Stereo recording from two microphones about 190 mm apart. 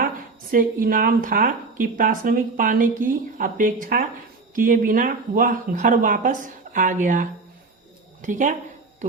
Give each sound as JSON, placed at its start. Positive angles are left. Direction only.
{"t": 0.5, "sound": "a woman's voice", "side_deg": -45}